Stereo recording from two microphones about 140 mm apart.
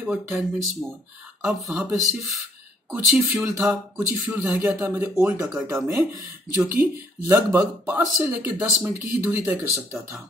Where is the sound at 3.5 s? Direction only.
15° right (ahead or behind).